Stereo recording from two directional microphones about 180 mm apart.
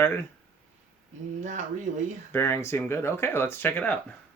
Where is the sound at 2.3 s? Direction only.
15° left (ahead or behind).